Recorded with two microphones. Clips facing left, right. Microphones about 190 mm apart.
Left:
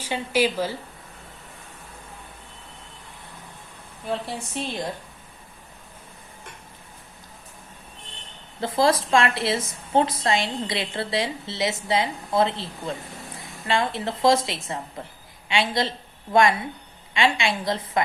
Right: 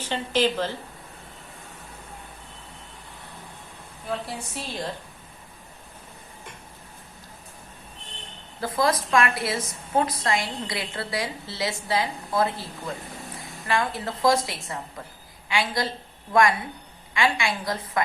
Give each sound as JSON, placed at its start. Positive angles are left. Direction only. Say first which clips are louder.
{"t": 0.0, "sound": "speech", "louder": "left 1 dB", "side_deg": 10}
{"t": 4.5, "sound": "a woman's voice", "louder": "left 4 dB", "side_deg": 20}
{"t": 8.6, "sound": "a woman's voice", "louder": "left 3 dB", "side_deg": 25}